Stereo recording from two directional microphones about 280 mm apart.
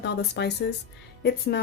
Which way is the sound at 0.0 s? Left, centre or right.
Left.